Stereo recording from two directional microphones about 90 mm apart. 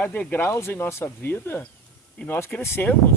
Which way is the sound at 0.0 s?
15° left (ahead or behind).